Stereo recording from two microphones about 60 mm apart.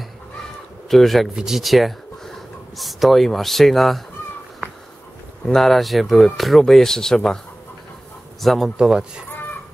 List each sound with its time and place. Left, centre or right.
0.8 s speech: centre
1.3 s speech: centre
5.5 s speech: centre
8.4 s speech: centre
8.7 s speech: centre
9.3 s crow: left